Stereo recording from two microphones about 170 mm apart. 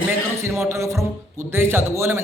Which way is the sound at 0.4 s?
15° right (ahead or behind).